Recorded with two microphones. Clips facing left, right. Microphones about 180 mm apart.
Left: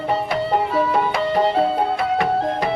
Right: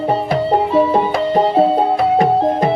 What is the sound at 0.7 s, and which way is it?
Music, 25° right (ahead or behind).